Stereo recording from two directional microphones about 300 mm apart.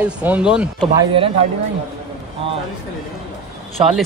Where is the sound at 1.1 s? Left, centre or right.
Centre.